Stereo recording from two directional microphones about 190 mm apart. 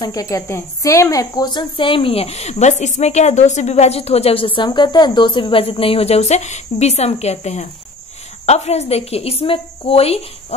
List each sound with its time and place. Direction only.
0.0 s a woman's voice: 20° left (ahead or behind)